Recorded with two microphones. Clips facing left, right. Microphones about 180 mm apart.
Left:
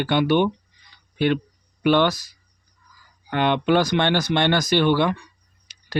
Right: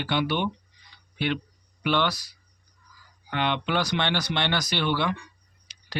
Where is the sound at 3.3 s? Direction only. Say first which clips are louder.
Left 7 dB; 50° left (ahead or behind).